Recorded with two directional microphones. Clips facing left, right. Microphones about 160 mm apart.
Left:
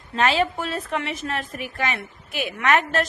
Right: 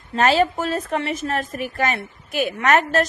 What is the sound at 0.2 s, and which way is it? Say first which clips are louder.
A woman's voice: right 4 dB; 40° right (ahead or behind).